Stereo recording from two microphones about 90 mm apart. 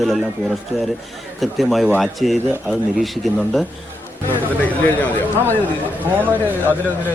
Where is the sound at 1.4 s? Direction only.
Centre (ahead or behind).